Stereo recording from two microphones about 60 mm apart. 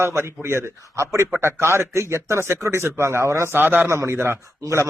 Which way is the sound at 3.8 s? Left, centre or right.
Right.